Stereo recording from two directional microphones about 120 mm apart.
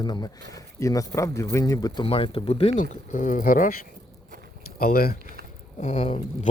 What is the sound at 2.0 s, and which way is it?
Speech, 50° left (ahead or behind).